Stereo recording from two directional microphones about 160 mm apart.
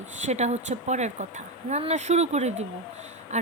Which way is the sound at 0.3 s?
45° right (ahead or behind).